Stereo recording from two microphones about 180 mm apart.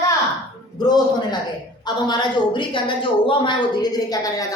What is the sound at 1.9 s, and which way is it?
A woman's voice, 25° left (ahead or behind).